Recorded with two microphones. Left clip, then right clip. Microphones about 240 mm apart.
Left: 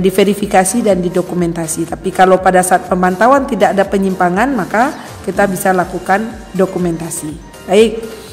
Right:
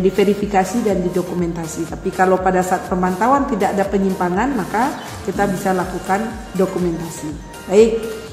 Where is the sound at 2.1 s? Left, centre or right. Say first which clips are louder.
Left 7 dB; left.